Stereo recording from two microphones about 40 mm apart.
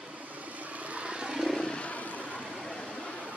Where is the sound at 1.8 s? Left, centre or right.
Left.